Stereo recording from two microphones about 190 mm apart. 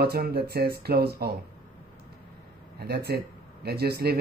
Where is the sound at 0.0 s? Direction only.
55° right (ahead or behind).